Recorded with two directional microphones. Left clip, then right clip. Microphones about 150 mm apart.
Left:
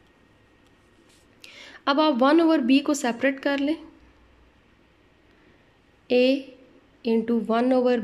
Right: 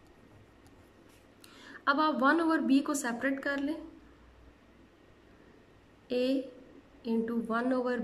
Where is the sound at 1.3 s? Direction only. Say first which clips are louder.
Left 7 dB; 15° left (ahead or behind).